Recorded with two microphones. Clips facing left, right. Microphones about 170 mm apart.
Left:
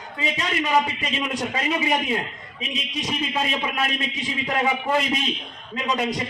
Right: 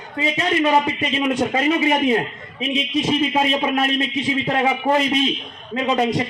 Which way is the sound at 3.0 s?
30° right (ahead or behind).